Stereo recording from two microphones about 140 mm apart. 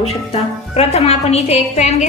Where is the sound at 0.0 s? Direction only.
45° left (ahead or behind).